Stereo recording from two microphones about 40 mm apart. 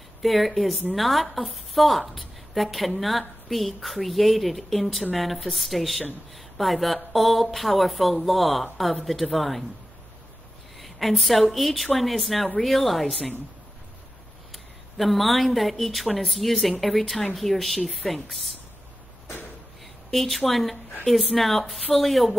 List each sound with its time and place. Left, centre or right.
0.2 s a woman's voice: centre
10.8 s a woman's voice: centre
14.5 s a woman's voice: centre
20.1 s a woman's voice: centre